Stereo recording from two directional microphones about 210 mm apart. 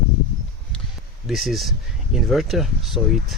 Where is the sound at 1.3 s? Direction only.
Centre (ahead or behind).